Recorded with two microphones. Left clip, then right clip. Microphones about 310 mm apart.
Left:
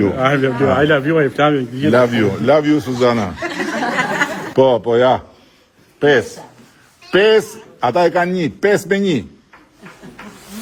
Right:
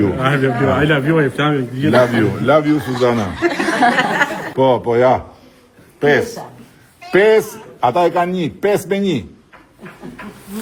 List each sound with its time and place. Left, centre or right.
0.0 s speech: left
1.9 s speech: left
3.7 s a sound: right
4.5 s a man's voice: left